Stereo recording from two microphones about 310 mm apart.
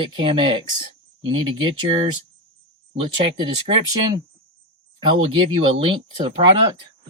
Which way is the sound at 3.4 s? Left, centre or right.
Centre.